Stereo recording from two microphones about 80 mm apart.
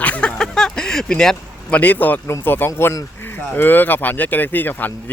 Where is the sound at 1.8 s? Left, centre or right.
Left.